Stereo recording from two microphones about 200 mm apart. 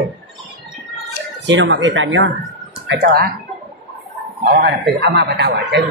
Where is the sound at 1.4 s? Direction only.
65° right (ahead or behind).